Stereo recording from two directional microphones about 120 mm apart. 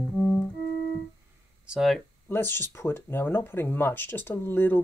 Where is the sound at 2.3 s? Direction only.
20° left (ahead or behind).